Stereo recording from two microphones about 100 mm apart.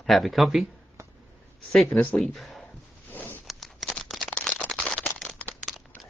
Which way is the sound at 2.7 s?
20° left (ahead or behind).